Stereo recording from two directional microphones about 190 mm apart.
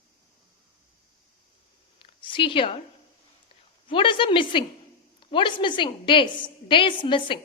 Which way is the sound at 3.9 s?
25° left (ahead or behind).